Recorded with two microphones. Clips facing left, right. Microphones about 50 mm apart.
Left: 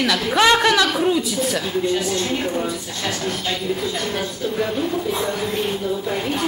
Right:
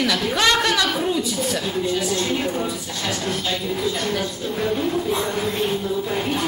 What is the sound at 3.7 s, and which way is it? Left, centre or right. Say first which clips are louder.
Speech: right 1 dB; centre.